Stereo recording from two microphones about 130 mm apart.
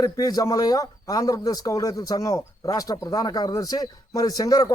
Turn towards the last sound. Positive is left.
turn(degrees=30)  # may be behind; listen again after turning